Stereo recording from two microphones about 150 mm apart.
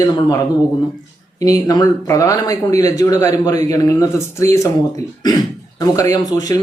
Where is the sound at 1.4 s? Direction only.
25° left (ahead or behind).